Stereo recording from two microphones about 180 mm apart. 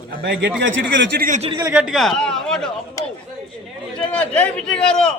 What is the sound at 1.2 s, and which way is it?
Speech, 45° right (ahead or behind).